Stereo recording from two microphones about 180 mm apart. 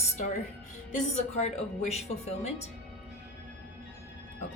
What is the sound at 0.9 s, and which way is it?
A woman's voice, 40° left (ahead or behind).